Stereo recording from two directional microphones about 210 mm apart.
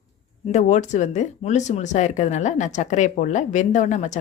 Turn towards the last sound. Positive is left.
turn(degrees=35)  # may be behind; listen again after turning